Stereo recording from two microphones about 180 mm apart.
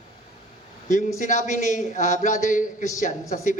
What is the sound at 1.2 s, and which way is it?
Speech, 45° left (ahead or behind).